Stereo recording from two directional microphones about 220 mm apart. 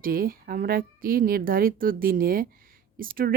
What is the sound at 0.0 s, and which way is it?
A woman's voice, 40° right (ahead or behind).